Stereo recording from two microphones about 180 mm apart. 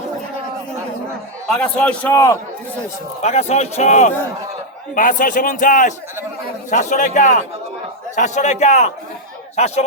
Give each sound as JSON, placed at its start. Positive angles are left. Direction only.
{"t": 1.5, "sound": "a man's voice", "side_deg": 5}
{"t": 3.2, "sound": "a man's voice", "side_deg": 40}